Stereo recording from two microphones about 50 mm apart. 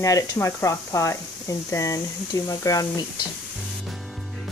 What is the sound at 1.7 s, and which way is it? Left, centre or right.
Speech, left.